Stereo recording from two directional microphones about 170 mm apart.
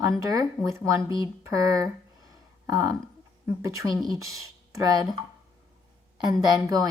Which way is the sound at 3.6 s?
20° right (ahead or behind).